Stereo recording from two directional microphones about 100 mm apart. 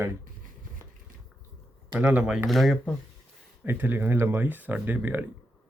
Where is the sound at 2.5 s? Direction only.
Centre (ahead or behind).